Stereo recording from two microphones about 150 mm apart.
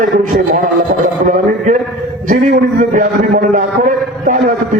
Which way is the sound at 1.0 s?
60° right (ahead or behind).